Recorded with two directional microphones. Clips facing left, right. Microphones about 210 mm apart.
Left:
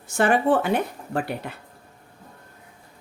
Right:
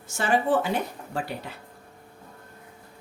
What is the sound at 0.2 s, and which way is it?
Speech, 60° left (ahead or behind).